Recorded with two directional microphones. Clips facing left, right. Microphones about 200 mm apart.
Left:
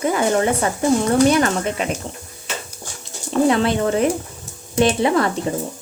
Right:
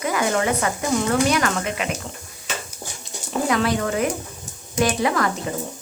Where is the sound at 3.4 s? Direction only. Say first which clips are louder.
Left 3 dB; 30° left (ahead or behind).